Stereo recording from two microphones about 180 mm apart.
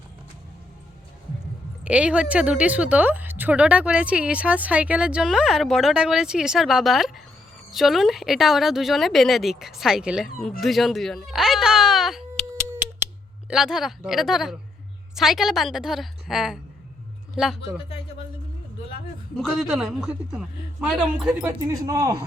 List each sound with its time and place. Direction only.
1.8 s speech: 5° right (ahead or behind)
10.6 s baby cry: centre (ahead or behind)
13.5 s speech: centre (ahead or behind)
19.4 s speech: centre (ahead or behind)
21.7 s speech: 20° right (ahead or behind)